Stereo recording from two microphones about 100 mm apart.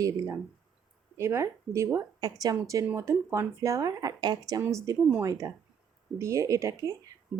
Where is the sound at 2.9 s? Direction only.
30° right (ahead or behind).